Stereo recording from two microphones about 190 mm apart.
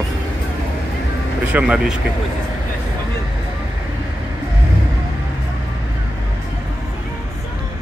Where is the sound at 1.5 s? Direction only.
5° right (ahead or behind).